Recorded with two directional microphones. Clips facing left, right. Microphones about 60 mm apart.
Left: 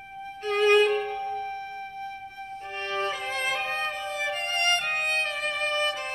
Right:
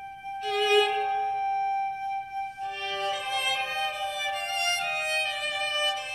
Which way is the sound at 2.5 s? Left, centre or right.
Left.